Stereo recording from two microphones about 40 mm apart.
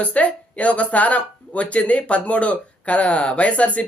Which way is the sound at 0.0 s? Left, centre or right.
Left.